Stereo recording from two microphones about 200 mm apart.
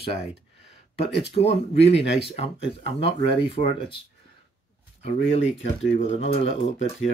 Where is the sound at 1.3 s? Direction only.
30° left (ahead or behind).